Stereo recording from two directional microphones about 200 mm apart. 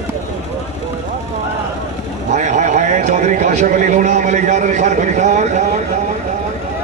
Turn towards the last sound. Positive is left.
turn(degrees=-35)  # may be behind; listen again after turning